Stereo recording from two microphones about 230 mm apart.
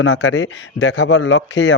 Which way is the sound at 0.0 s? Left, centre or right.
Left.